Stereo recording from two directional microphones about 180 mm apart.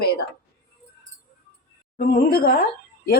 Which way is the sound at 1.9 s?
55° left (ahead or behind).